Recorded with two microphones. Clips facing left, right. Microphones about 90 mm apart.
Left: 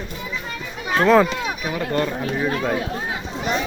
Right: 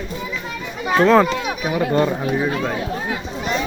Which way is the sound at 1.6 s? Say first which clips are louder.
Right 6 dB; 5° right (ahead or behind).